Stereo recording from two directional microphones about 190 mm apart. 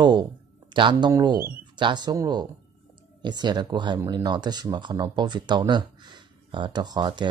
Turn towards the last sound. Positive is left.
turn(degrees=-25)  # may be behind; listen again after turning